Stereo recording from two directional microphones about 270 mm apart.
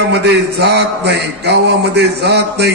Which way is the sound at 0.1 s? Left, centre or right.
Right.